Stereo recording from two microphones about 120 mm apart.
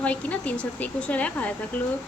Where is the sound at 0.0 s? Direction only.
10° left (ahead or behind).